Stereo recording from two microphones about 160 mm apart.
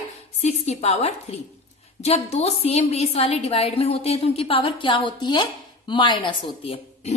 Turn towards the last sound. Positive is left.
turn(degrees=35)  # may be behind; listen again after turning